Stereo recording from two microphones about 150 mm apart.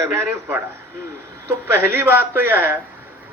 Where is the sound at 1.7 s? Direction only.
15° right (ahead or behind).